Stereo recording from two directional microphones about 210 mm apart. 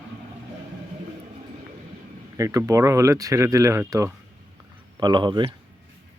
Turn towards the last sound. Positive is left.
turn(degrees=-20)  # may be behind; listen again after turning